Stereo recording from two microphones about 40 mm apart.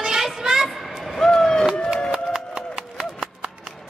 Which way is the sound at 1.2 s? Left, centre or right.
Centre.